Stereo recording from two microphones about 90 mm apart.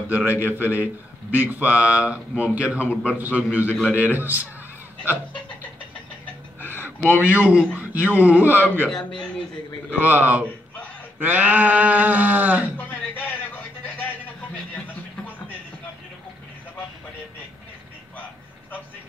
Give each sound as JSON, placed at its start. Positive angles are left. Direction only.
{"t": 0.1, "sound": "speech", "side_deg": -15}
{"t": 7.1, "sound": "speech", "side_deg": -15}
{"t": 8.9, "sound": "a man's voice", "side_deg": 10}
{"t": 10.0, "sound": "speech", "side_deg": -20}
{"t": 12.7, "sound": "music", "side_deg": 20}
{"t": 14.7, "sound": "a sound", "side_deg": 15}